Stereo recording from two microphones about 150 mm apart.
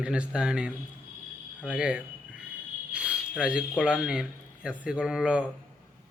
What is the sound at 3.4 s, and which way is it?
A man's voice, 5° right (ahead or behind).